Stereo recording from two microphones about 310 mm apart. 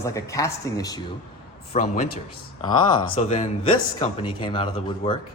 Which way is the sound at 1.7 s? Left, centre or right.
Left.